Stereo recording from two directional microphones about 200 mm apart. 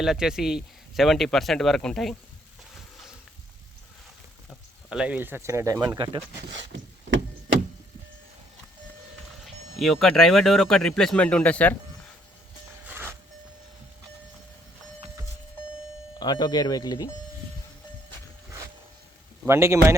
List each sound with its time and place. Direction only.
0.0 s speech: centre (ahead or behind)
4.9 s speech: 5° right (ahead or behind)
6.5 s a sound: 65° right (ahead or behind)
9.4 s speech: centre (ahead or behind)
12.9 s vehicle: 10° right (ahead or behind)
16.1 s speech: 20° left (ahead or behind)
19.5 s speech: 15° right (ahead or behind)